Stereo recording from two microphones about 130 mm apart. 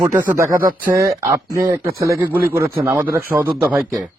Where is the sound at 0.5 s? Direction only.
90° right.